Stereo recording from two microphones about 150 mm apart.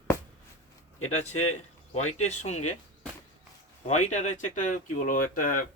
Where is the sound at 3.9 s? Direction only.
50° left (ahead or behind).